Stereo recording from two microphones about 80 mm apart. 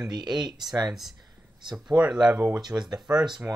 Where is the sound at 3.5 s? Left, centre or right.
Right.